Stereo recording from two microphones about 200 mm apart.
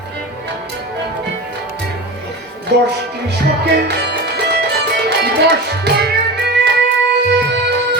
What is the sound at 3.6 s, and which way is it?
Music, 55° right (ahead or behind).